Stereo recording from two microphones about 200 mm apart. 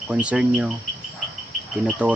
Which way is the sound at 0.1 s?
5° right (ahead or behind).